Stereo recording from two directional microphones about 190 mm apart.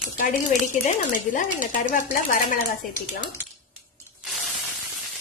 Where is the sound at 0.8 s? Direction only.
45° left (ahead or behind).